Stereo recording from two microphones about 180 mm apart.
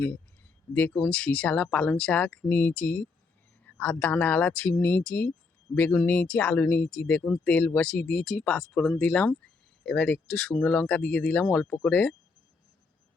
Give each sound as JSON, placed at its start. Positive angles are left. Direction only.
{"t": 0.7, "sound": "speech", "side_deg": 10}